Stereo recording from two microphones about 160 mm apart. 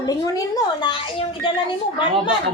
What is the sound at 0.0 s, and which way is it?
A woman's voice, 25° left (ahead or behind).